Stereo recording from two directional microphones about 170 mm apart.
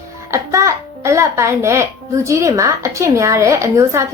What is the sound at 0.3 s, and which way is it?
A child's voice, 15° right (ahead or behind).